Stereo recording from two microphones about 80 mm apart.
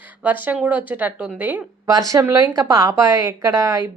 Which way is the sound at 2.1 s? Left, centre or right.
Right.